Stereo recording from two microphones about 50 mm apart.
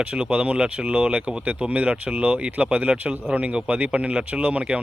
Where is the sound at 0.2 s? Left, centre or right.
Right.